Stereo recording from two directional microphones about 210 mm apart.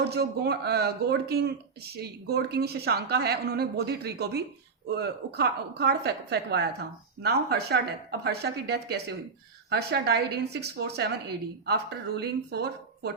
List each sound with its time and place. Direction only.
0.1 s speech: 50° right (ahead or behind)